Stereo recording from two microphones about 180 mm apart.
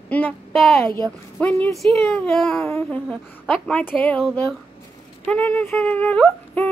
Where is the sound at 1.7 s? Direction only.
Centre (ahead or behind).